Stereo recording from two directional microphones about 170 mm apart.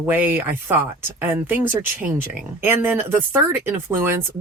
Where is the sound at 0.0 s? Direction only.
10° right (ahead or behind).